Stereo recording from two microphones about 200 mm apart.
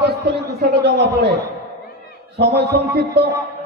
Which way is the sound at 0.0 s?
55° right (ahead or behind).